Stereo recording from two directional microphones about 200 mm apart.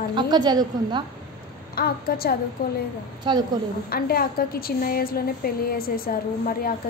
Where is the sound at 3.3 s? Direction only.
25° right (ahead or behind).